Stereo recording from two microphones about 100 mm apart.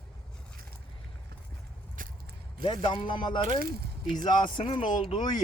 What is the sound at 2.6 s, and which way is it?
Speech, 55° left (ahead or behind).